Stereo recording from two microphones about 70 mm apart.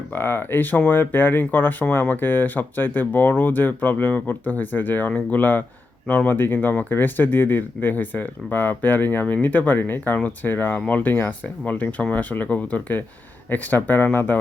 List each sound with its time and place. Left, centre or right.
0.1 s speech: left